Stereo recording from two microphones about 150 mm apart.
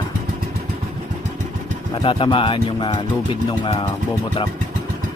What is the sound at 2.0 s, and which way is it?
Speech, 35° left (ahead or behind).